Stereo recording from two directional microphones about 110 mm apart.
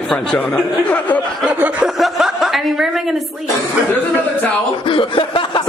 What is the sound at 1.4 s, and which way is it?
Chuckle, 10° right (ahead or behind).